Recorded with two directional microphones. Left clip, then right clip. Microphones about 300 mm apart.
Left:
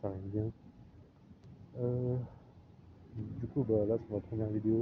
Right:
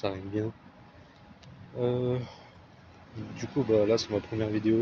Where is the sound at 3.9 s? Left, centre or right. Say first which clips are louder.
Right 8 dB; right.